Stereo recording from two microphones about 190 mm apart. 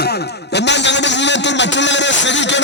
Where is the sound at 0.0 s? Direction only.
60° left (ahead or behind).